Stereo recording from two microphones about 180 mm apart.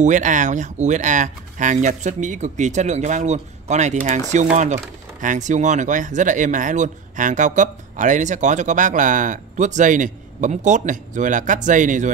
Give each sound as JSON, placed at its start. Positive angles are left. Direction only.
{"t": 0.0, "sound": "speech", "side_deg": -45}
{"t": 5.2, "sound": "speech", "side_deg": -45}